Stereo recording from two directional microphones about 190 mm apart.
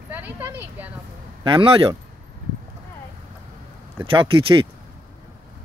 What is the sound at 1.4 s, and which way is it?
Speech, 25° right (ahead or behind).